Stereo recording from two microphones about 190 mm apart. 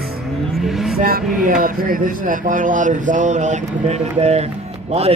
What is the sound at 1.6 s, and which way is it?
Speech, 50° right (ahead or behind).